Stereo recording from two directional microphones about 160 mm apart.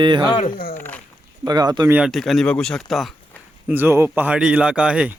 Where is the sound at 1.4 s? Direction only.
25° right (ahead or behind).